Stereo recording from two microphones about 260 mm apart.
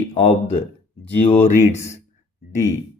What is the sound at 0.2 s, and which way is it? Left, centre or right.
Speech, left.